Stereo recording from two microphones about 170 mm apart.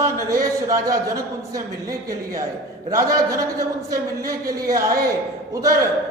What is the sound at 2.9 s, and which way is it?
A man's voice, 20° right (ahead or behind).